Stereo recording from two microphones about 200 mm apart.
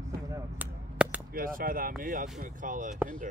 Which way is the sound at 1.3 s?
45° right (ahead or behind).